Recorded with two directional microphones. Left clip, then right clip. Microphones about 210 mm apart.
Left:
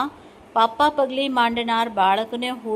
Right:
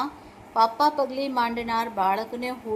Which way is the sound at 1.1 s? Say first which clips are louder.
Left 5 dB; 10° left (ahead or behind).